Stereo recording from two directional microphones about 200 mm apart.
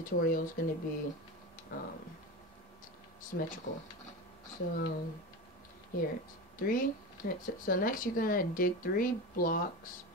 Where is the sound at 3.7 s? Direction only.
40° left (ahead or behind).